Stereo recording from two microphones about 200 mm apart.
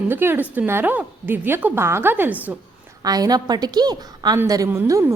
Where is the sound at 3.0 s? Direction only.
20° right (ahead or behind).